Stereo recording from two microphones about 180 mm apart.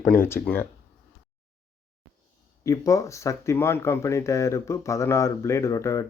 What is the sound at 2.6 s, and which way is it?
Speech, 20° left (ahead or behind).